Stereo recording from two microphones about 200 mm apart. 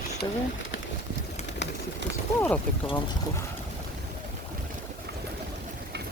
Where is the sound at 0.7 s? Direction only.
75° left (ahead or behind).